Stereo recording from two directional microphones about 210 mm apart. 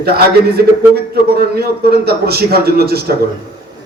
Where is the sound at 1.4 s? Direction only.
50° right (ahead or behind).